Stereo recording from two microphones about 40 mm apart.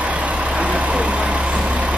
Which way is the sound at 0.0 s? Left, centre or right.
Right.